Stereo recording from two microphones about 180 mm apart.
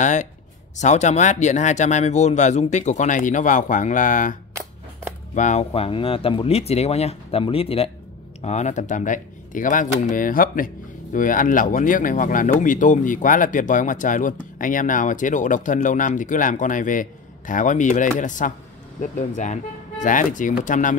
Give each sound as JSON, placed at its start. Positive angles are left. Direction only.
{"t": 0.0, "sound": "speech", "side_deg": 40}